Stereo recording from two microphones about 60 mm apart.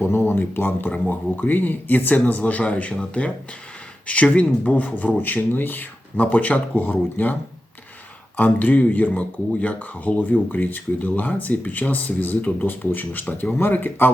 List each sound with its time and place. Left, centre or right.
0.1 s speech: left
8.4 s speech: left